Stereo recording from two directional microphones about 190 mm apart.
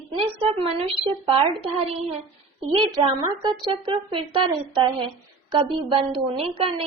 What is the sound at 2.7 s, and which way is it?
A woman's voice, 25° right (ahead or behind).